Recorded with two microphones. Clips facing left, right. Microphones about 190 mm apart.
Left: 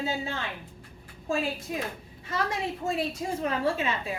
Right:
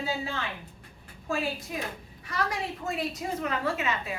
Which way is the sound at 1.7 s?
25° left (ahead or behind).